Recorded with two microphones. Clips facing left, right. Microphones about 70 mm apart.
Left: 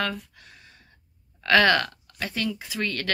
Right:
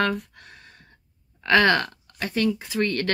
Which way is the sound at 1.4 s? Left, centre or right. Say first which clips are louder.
Right 1 dB; right.